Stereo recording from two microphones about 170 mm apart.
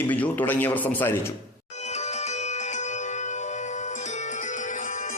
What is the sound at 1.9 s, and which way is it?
Music, 40° left (ahead or behind).